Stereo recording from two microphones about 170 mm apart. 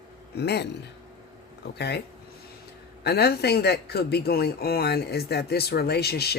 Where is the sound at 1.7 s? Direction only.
75° left (ahead or behind).